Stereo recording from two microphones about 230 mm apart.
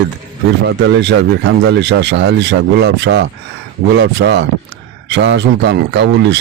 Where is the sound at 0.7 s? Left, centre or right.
Right.